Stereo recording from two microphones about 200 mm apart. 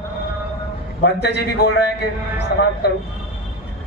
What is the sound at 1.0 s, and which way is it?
Speech, 55° left (ahead or behind).